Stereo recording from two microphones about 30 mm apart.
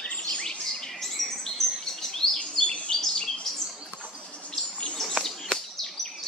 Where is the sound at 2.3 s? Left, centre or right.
Left.